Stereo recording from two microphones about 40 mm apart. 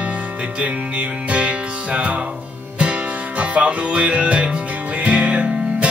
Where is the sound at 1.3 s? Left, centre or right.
Right.